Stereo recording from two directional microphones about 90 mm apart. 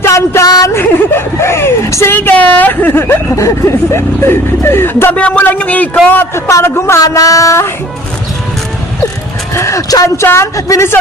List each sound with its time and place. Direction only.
0.0 s a sound: 30° left (ahead or behind)
0.7 s speech: 30° left (ahead or behind)
2.1 s speech: 20° left (ahead or behind)
5.1 s a man's voice: 15° left (ahead or behind); by 7.7 s 35° left (ahead or behind)
9.6 s speech: 35° left (ahead or behind)